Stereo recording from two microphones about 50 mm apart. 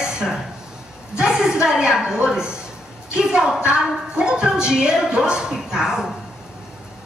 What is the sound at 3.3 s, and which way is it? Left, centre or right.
A woman's voice, centre.